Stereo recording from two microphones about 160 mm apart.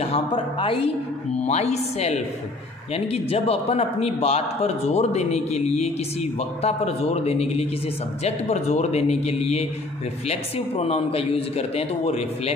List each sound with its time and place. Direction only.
0.0 s a man's voice: 35° left (ahead or behind)